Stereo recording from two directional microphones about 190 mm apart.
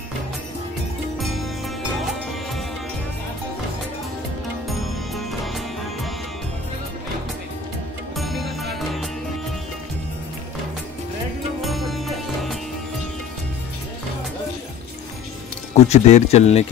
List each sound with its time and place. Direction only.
1.1 s music: centre (ahead or behind)
4.6 s music: centre (ahead or behind)
8.2 s music: centre (ahead or behind)
11.6 s music: centre (ahead or behind)
15.7 s speech: 35° left (ahead or behind)